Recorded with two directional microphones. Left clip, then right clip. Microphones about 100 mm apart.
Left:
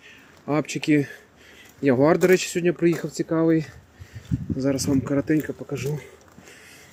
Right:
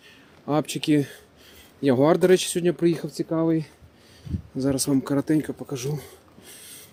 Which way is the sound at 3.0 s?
5° right (ahead or behind).